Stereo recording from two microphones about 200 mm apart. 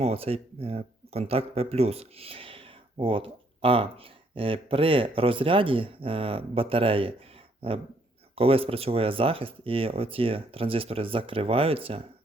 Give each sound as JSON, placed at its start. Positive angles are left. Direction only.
{"t": 0.0, "sound": "speech", "side_deg": -30}